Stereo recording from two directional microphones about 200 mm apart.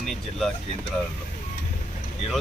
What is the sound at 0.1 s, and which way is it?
Speech, centre (ahead or behind).